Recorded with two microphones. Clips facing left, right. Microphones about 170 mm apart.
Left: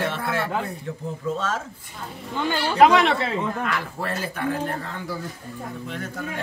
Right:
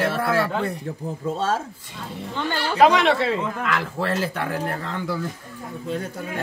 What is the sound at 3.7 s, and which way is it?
Speech, 90° right.